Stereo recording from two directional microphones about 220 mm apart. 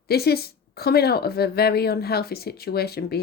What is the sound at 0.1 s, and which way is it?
A woman's voice, 45° left (ahead or behind).